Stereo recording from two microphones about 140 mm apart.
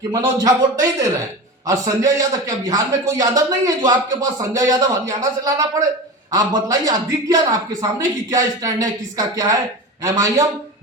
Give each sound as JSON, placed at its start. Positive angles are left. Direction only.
{"t": 0.1, "sound": "a man's voice", "side_deg": -25}